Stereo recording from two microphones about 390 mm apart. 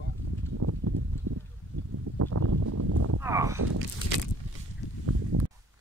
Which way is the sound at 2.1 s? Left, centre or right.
Right.